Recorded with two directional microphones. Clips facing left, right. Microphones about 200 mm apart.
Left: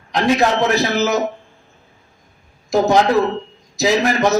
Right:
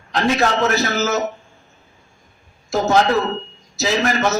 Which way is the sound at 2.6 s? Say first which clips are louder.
Left 2 dB; 15° left (ahead or behind).